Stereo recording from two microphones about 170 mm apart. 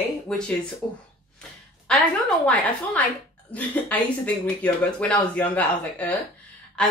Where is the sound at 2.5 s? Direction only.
10° left (ahead or behind).